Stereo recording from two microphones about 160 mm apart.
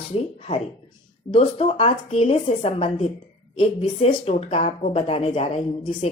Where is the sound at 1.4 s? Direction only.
40° left (ahead or behind).